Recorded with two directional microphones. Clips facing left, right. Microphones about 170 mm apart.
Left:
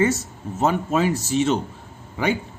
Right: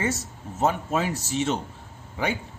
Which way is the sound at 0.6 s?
90° left.